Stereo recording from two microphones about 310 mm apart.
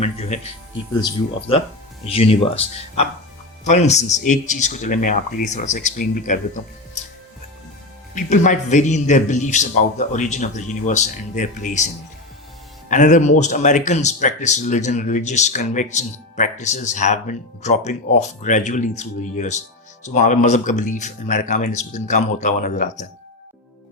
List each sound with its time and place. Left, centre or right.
0.0 s speech: left
8.1 s speech: left
12.9 s speech: left